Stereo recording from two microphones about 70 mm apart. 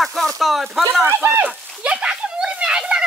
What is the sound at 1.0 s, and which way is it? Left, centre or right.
Speech, right.